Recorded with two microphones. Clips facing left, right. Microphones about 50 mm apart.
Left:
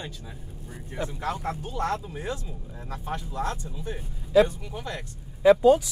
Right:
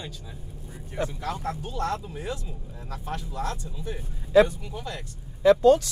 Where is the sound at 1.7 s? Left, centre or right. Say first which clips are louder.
Left 2 dB; left.